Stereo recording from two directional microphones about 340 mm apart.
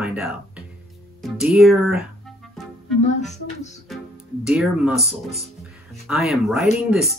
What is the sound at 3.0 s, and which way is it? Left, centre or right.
Speech, centre.